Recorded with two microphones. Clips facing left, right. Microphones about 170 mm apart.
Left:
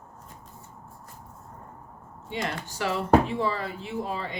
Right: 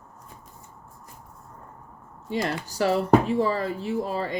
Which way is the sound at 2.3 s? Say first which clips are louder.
Right 4 dB; 40° right (ahead or behind).